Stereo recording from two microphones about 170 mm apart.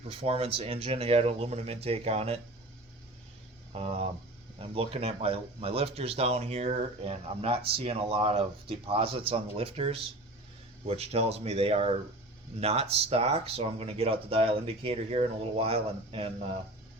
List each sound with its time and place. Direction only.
0.1 s speech: 35° right (ahead or behind)
3.7 s speech: 35° right (ahead or behind)